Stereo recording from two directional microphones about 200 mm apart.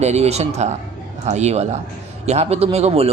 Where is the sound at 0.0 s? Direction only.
35° right (ahead or behind).